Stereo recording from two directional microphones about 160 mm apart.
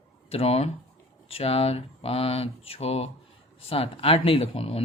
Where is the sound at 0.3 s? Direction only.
35° left (ahead or behind).